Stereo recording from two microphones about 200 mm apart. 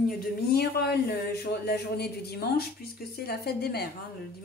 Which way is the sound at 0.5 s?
55° left (ahead or behind).